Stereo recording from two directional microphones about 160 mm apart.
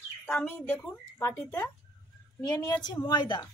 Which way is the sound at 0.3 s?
15° left (ahead or behind).